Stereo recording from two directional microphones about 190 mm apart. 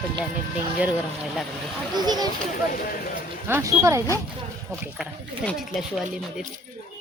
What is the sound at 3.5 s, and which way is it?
Speech, 15° right (ahead or behind).